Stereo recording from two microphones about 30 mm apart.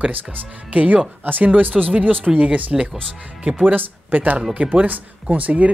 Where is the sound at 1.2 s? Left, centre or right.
Right.